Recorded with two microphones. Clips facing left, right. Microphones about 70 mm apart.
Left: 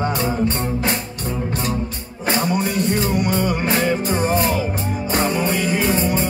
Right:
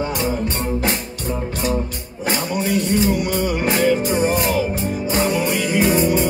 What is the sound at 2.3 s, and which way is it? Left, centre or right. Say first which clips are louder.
Music: left 1 dB; left.